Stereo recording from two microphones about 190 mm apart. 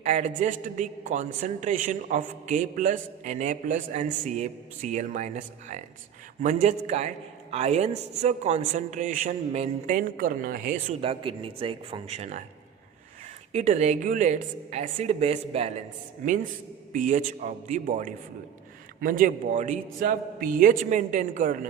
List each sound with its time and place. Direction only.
0.0 s a woman's voice: 40° right (ahead or behind)
11.0 s speech: 30° right (ahead or behind)
13.5 s a woman's voice: 35° right (ahead or behind)